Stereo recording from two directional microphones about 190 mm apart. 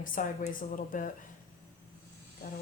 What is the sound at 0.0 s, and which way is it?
Speech, 45° left (ahead or behind).